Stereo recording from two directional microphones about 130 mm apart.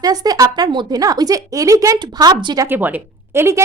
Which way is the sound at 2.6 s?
15° right (ahead or behind).